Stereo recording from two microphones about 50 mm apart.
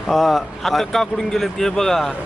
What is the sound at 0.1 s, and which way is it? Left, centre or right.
Speech, centre.